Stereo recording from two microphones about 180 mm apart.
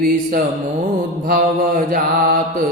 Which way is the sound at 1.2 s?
50° right (ahead or behind).